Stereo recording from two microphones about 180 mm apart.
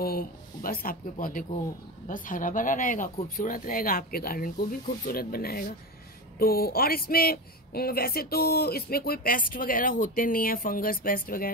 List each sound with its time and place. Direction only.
0.0 s a woman's voice: 55° left (ahead or behind)